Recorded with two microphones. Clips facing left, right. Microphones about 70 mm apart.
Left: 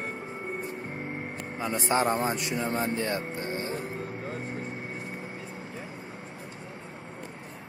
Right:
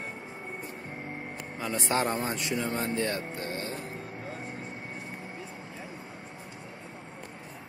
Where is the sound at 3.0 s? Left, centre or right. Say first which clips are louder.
Left 1 dB; centre.